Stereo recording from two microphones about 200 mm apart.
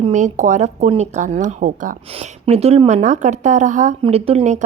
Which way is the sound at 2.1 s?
30° right (ahead or behind).